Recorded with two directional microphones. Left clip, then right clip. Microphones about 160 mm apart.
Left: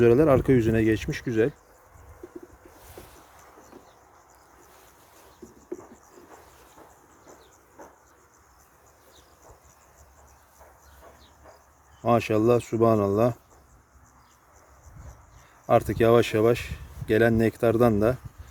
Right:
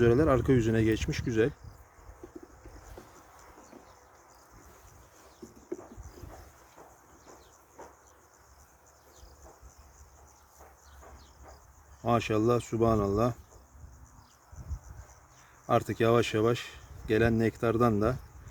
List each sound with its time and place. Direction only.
0.0 s speech: 30° left (ahead or behind)
12.0 s speech: 30° left (ahead or behind)
15.6 s speech: 30° left (ahead or behind)